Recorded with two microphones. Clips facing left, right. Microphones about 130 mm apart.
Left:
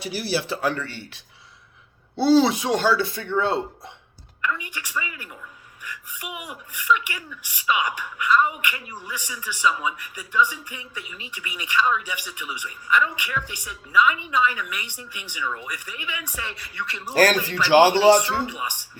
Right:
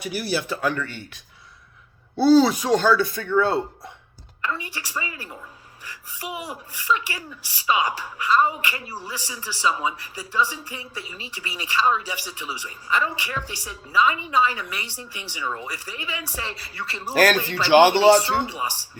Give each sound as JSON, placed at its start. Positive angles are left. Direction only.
{"t": 0.0, "sound": "speech", "side_deg": 30}
{"t": 4.4, "sound": "speech", "side_deg": -35}